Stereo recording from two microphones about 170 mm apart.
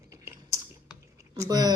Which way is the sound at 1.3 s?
20° right (ahead or behind).